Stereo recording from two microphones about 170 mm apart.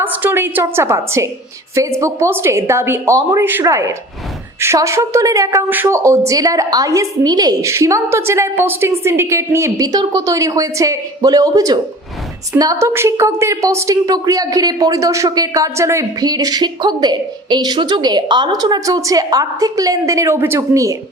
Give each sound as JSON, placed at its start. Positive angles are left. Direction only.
{"t": 0.0, "sound": "a woman's voice", "side_deg": -10}